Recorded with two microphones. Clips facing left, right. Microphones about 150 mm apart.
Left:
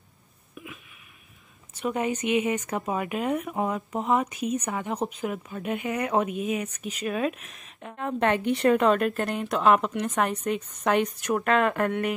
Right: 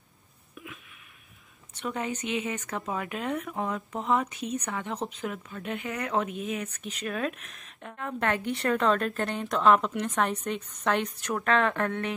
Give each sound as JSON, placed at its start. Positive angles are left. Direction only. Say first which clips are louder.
{"t": 0.6, "sound": "a sound", "louder": "left 2 dB", "side_deg": 5}
{"t": 1.8, "sound": "speech", "louder": "left 5 dB", "side_deg": 10}
{"t": 7.9, "sound": "a woman's voice", "louder": "left 5 dB", "side_deg": 20}
{"t": 8.9, "sound": "speech", "louder": "left 3 dB", "side_deg": 5}